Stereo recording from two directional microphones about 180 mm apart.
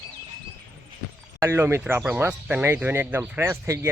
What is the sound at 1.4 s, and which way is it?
Speech, 15° right (ahead or behind).